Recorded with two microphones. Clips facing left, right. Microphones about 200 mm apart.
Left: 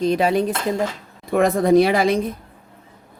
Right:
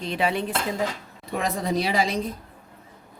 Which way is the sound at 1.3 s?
55° left (ahead or behind).